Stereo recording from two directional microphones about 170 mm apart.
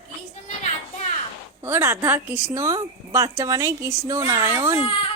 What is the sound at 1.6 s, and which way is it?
Speech, 15° right (ahead or behind).